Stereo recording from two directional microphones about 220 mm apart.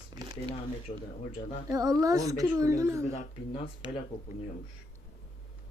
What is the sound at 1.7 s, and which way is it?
A woman's voice, 15° right (ahead or behind).